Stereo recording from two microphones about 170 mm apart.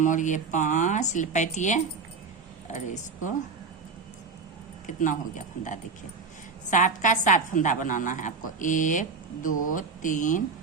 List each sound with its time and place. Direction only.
0.0 s a woman's voice: 50° left (ahead or behind)
4.9 s a woman's voice: 50° left (ahead or behind)